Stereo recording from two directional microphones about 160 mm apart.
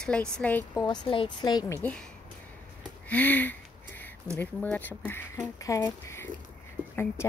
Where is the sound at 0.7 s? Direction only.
25° left (ahead or behind).